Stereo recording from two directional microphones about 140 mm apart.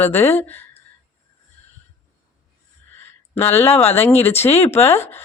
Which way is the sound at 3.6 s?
45° left (ahead or behind).